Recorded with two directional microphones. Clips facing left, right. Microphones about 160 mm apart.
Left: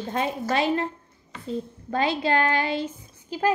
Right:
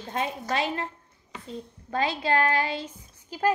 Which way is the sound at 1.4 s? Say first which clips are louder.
Left 9 dB; 30° left (ahead or behind).